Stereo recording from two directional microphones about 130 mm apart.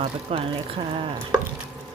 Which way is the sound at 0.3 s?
45° right (ahead or behind).